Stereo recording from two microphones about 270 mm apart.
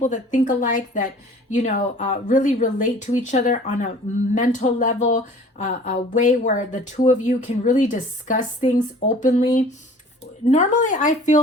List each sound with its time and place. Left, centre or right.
0.0 s speech: left
10.5 s speech: left